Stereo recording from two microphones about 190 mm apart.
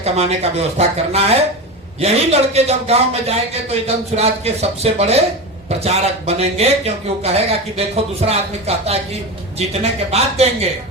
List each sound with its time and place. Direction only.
0.0 s speech: 35° right (ahead or behind)